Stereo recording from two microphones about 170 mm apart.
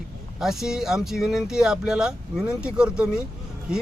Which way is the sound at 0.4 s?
Centre (ahead or behind).